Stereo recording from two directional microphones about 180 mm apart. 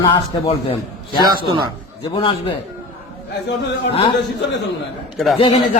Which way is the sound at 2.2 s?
30° left (ahead or behind).